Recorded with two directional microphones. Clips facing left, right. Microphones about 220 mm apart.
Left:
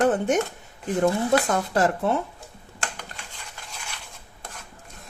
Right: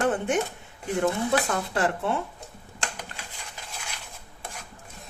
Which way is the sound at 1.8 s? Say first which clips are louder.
Left 4 dB; 40° left (ahead or behind).